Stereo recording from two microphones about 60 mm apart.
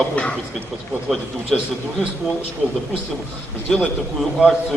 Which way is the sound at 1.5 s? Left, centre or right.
Centre.